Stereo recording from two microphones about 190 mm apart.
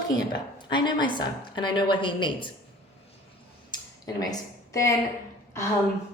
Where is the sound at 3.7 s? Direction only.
20° left (ahead or behind).